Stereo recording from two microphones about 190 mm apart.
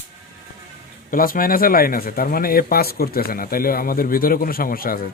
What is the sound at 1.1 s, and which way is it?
Speech, 50° left (ahead or behind).